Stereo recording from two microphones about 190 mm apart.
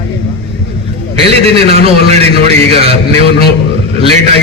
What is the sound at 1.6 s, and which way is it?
A man's voice, 30° right (ahead or behind).